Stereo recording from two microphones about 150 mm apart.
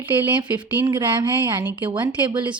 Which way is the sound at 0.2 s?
10° right (ahead or behind).